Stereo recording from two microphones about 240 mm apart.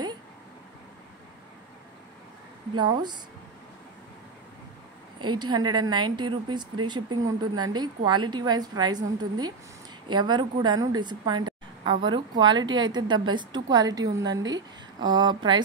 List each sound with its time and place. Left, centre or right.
2.7 s a woman's voice: centre
5.2 s a woman's voice: centre